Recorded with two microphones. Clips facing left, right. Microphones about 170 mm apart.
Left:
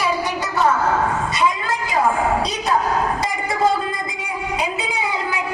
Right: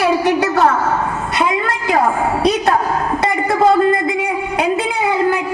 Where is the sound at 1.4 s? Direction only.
60° right (ahead or behind).